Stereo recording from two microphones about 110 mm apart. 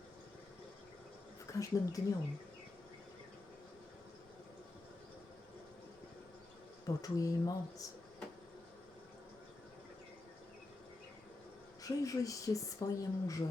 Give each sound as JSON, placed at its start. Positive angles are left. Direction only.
{"t": 1.5, "sound": "speech", "side_deg": 30}
{"t": 6.8, "sound": "speech", "side_deg": 30}
{"t": 11.8, "sound": "speech", "side_deg": 30}